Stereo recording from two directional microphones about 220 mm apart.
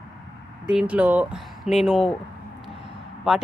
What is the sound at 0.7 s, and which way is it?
Speech, 5° right (ahead or behind).